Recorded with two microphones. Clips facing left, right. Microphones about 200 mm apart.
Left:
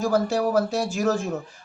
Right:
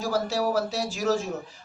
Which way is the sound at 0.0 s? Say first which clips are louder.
Left 4 dB; 50° left (ahead or behind).